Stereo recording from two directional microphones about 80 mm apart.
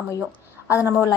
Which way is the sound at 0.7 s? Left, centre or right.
Right.